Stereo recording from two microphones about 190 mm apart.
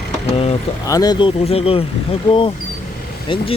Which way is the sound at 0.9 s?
20° left (ahead or behind).